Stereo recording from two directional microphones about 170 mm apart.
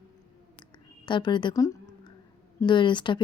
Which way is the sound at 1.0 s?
30° left (ahead or behind).